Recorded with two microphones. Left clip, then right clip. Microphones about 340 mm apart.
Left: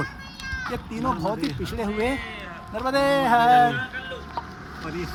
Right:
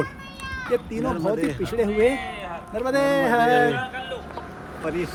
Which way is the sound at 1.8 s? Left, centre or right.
Centre.